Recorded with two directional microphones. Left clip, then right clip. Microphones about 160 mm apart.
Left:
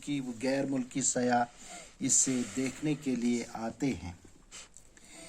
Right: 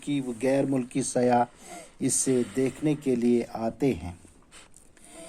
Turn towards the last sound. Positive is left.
turn(degrees=-45)  # may be behind; listen again after turning